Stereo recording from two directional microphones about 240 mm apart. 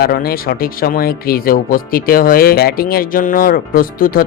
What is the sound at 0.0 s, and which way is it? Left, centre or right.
Speech, left.